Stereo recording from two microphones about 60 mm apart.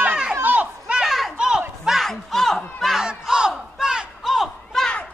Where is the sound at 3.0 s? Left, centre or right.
Centre.